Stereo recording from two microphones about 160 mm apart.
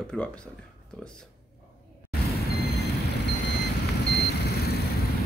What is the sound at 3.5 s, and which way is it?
Reversing beeps, 90° left.